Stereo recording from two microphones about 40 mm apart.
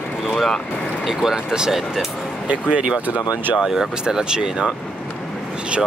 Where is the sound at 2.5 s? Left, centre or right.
Right.